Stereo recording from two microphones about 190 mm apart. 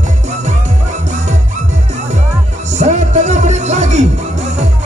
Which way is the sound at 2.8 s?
40° right (ahead or behind).